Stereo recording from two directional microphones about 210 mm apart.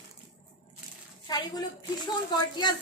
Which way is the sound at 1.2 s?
20° left (ahead or behind).